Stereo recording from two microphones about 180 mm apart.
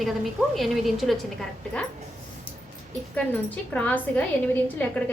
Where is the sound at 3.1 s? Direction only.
10° left (ahead or behind).